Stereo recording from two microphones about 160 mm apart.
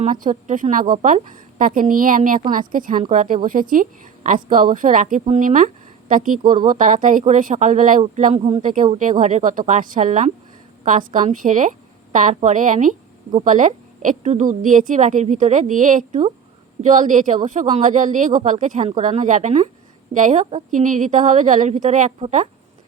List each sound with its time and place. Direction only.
0.0 s a woman's voice: 55° right (ahead or behind); by 8.6 s 40° right (ahead or behind)
8.6 s a woman's voice: 55° right (ahead or behind)